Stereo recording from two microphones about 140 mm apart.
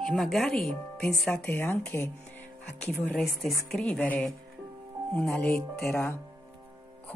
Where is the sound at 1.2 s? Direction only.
15° left (ahead or behind).